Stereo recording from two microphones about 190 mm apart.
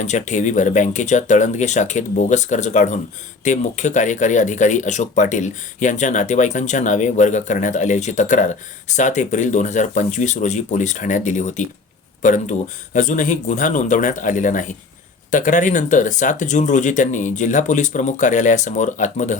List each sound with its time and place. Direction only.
0.0 s speech: 40° left (ahead or behind)